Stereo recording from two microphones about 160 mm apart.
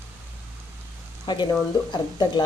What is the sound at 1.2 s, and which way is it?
Speech, 25° left (ahead or behind).